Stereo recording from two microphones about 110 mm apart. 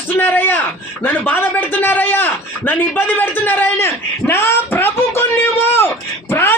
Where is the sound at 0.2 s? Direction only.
20° left (ahead or behind).